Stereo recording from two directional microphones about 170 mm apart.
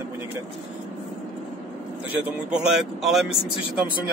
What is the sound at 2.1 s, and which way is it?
Speech, 5° right (ahead or behind).